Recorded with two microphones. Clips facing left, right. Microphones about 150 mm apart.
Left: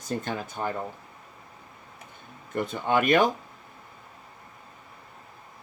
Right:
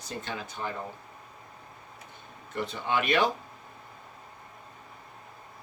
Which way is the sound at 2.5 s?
50° left (ahead or behind).